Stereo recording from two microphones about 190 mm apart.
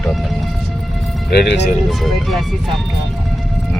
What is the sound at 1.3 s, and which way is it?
Speech, 60° left (ahead or behind).